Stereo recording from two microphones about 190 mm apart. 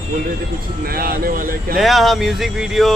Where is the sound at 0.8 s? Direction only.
50° right (ahead or behind).